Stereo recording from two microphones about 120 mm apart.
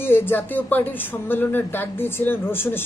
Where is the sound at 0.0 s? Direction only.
20° left (ahead or behind).